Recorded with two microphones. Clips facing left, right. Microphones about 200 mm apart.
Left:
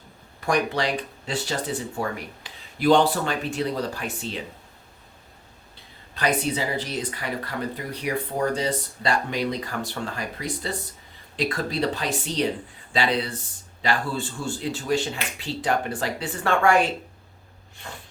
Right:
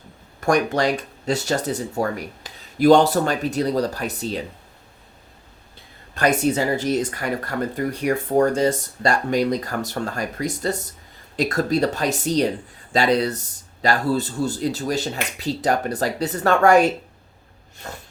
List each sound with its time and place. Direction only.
0.3 s speech: 45° right (ahead or behind)
6.1 s speech: 45° right (ahead or behind)